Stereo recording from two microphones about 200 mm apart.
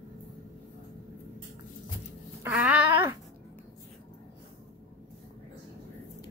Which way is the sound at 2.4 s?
5° right (ahead or behind).